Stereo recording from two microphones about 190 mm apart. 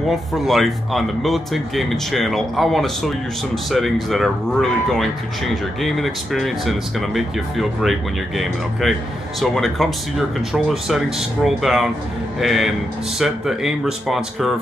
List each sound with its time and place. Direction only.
0.1 s speech: centre (ahead or behind)